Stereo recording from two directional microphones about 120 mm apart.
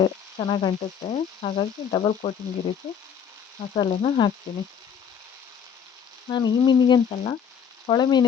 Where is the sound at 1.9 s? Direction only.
50° left (ahead or behind).